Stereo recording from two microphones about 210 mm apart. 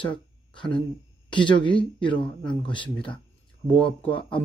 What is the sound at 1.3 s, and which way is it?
Speech, 20° left (ahead or behind).